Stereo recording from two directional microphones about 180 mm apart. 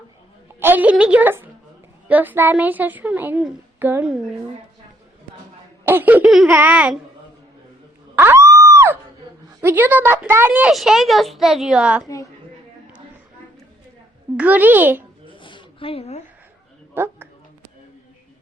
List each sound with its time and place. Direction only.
0.6 s a woman's voice: 10° right (ahead or behind)
5.8 s a woman's voice: 10° right (ahead or behind)
8.1 s a sound: 10° right (ahead or behind)
9.6 s a woman's voice: 10° right (ahead or behind)
12.0 s a woman's voice: 20° left (ahead or behind)
14.3 s a woman's voice: 10° right (ahead or behind)
15.3 s a sound: 25° left (ahead or behind)
16.9 s speech: 10° right (ahead or behind)